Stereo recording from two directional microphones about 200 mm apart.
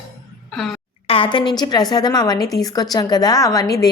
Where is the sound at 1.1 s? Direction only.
25° left (ahead or behind).